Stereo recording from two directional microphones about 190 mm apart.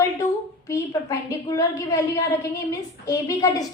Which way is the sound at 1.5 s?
20° left (ahead or behind).